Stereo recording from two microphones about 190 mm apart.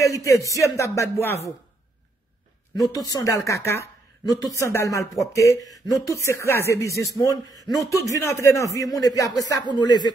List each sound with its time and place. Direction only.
0.0 s speech: 15° left (ahead or behind)
3.0 s speech: 20° left (ahead or behind)